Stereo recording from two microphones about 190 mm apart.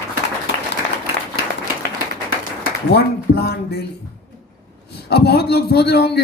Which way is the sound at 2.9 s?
55° left (ahead or behind).